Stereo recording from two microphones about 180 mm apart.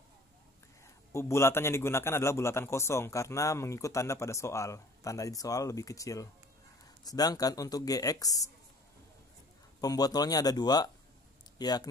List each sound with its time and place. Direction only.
1.1 s a man's voice: 15° left (ahead or behind)
9.8 s speech: 20° left (ahead or behind)